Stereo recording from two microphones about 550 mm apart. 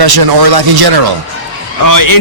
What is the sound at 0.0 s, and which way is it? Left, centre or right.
Speech, right.